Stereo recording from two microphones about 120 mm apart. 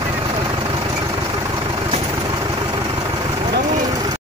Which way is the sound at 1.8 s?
45° right (ahead or behind).